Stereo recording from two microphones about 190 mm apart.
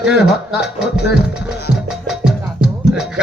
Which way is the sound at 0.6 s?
60° left (ahead or behind).